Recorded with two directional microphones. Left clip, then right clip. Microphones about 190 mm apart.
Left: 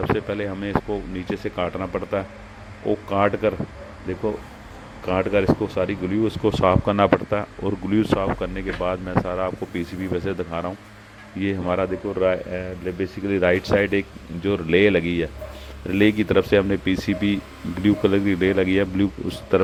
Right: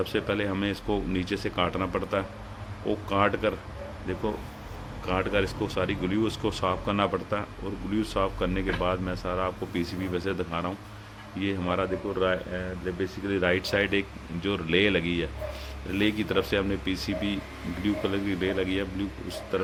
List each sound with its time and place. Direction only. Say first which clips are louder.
0.2 s a man's voice: left 1 dB; 30° left (ahead or behind)
5.0 s a man's voice: left 7 dB; 25° left (ahead or behind)